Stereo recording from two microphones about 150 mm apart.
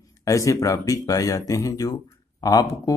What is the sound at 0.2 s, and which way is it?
A man's voice, 20° left (ahead or behind).